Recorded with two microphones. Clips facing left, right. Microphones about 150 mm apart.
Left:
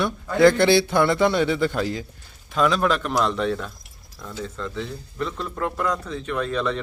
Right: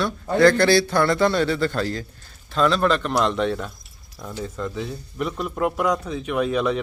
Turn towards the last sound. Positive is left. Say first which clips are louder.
# right 3 dB
turn(degrees=-10)  # may be behind; listen again after turning